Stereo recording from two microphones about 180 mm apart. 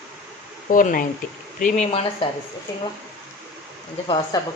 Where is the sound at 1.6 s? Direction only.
35° left (ahead or behind).